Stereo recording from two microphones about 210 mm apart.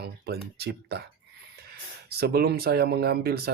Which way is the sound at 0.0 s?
50° right (ahead or behind).